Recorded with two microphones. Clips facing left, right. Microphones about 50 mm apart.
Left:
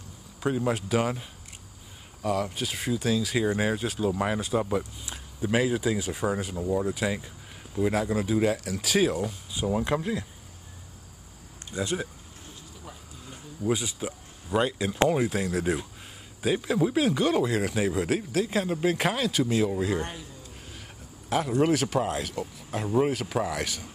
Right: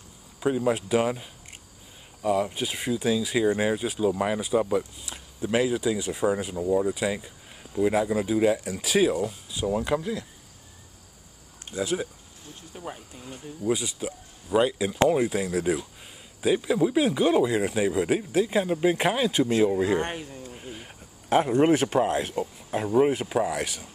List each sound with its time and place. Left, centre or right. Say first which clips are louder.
0.4 s speech: right 3 dB; centre
2.2 s speech: right 3 dB; centre
3.0 s speech: right 3 dB; centre
11.7 s speech: right 2 dB; centre
12.7 s speech: right 11 dB; right
13.6 s speech: right 1 dB; centre; by 20.0 s right
20.0 s speech: right 5 dB; right
20.5 s a sound: right 5 dB; right
22.7 s speech: right 3 dB; centre
23.3 s speech: right 3 dB; centre